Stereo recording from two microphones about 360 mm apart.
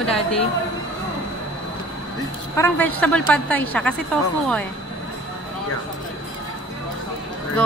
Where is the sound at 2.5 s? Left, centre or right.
Centre.